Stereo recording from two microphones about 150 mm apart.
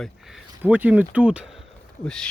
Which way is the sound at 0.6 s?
10° right (ahead or behind).